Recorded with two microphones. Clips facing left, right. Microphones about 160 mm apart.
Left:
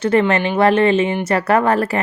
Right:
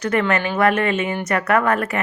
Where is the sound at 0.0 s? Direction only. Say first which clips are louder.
Left 4 dB; 30° left (ahead or behind).